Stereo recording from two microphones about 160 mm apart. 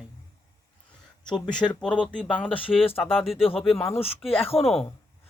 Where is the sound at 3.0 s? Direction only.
Centre (ahead or behind).